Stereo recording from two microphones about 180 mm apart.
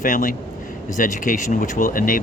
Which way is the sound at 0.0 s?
50° left (ahead or behind).